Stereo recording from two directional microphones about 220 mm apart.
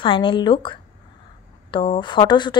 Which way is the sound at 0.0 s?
20° left (ahead or behind).